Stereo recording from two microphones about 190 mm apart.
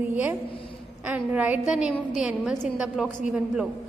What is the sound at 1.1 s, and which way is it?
A woman's voice, 10° right (ahead or behind).